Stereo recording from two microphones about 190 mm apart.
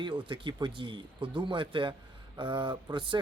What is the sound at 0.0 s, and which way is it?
Speech, 25° right (ahead or behind).